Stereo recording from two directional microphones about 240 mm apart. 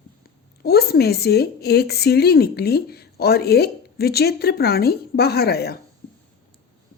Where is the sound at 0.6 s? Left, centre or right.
Left.